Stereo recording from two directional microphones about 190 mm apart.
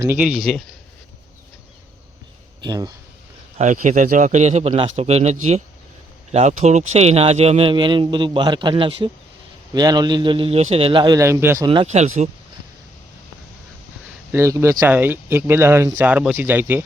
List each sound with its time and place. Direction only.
0.0 s speech: 10° right (ahead or behind)
2.6 s speech: 20° right (ahead or behind)
3.6 s speech: 40° right (ahead or behind); by 11.7 s 15° right (ahead or behind)
11.7 s speech: 30° right (ahead or behind)
14.3 s speech: 15° right (ahead or behind)